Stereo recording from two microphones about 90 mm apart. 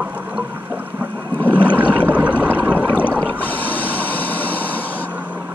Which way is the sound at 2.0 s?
20° right (ahead or behind).